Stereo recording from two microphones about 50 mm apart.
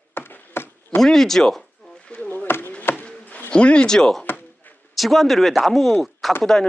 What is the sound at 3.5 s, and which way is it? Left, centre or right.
Speech, centre.